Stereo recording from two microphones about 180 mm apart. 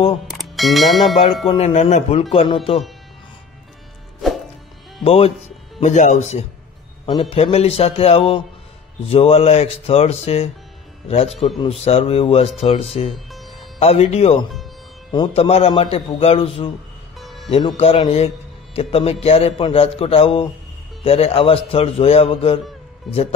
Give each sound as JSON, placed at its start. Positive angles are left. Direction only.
{"t": 0.3, "sound": "bell", "side_deg": 0}
{"t": 1.5, "sound": "a man's voice", "side_deg": 35}
{"t": 5.0, "sound": "a man's voice", "side_deg": 30}
{"t": 17.2, "sound": "music", "side_deg": 0}
{"t": 17.5, "sound": "a man's voice", "side_deg": 30}